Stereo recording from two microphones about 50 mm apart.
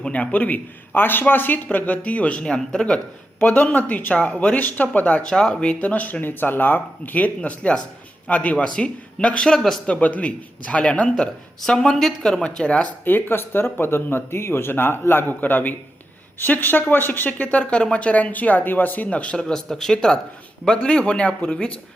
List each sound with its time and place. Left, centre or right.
0.0 s speech: left
2.4 s speech: centre
5.3 s speech: centre
5.8 s speech: left
9.6 s a man's voice: centre
10.0 s speech: left
11.6 s speech: centre
13.1 s speech: left